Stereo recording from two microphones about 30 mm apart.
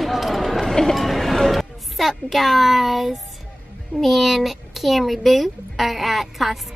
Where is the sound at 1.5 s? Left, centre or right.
Centre.